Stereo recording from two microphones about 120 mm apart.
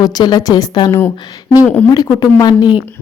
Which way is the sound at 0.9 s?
20° left (ahead or behind).